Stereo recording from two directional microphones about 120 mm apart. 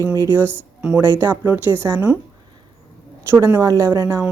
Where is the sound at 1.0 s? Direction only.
20° right (ahead or behind).